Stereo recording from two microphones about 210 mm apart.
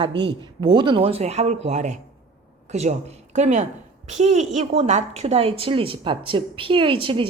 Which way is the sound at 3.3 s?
35° right (ahead or behind).